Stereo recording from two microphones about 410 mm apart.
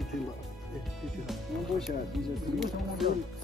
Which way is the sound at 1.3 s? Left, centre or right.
Centre.